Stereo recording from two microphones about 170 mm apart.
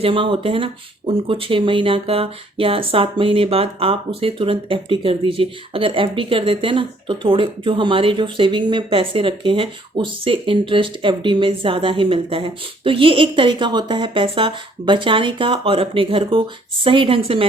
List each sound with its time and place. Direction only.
0.0 s speech: 30° right (ahead or behind)